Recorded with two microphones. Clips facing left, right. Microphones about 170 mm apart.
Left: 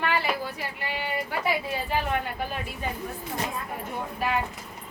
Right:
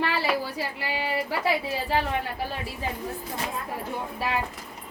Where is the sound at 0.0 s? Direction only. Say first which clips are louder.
Right 1 dB; 30° right (ahead or behind).